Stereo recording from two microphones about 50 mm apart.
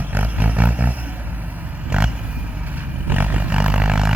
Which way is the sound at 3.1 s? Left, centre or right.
Right.